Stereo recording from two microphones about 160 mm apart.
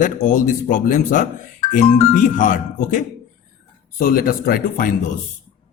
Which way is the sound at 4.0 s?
65° left (ahead or behind).